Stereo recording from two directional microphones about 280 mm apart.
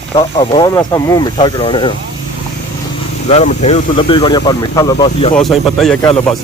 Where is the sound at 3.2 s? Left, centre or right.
Left.